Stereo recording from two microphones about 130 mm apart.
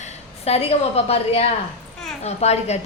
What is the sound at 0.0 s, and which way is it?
A woman's voice, 50° left (ahead or behind).